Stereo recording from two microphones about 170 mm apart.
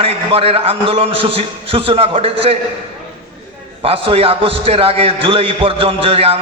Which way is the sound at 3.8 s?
35° right (ahead or behind).